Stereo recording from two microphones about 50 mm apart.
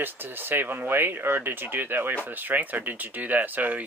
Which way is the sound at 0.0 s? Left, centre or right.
Right.